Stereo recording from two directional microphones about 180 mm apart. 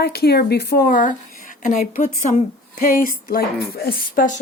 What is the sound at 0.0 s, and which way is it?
A woman's voice, 65° left (ahead or behind).